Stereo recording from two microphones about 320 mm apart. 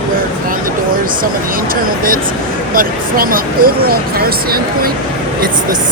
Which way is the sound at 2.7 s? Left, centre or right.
Right.